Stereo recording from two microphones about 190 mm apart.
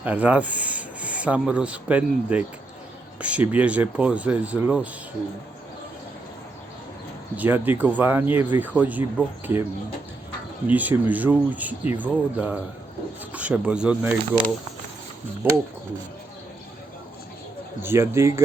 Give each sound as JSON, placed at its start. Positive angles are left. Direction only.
{"t": 0.0, "sound": "speech", "side_deg": -10}
{"t": 7.3, "sound": "speech", "side_deg": -10}
{"t": 10.7, "sound": "speech", "side_deg": -10}
{"t": 15.4, "sound": "speech", "side_deg": -10}
{"t": 17.8, "sound": "speech", "side_deg": -15}